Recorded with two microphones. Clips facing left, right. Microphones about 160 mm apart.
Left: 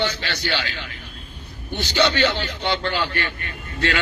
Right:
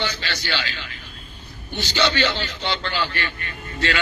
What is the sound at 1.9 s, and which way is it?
A man's voice, 50° left (ahead or behind).